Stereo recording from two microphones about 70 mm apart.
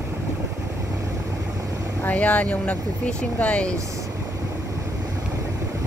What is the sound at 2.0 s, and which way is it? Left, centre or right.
Speech, centre.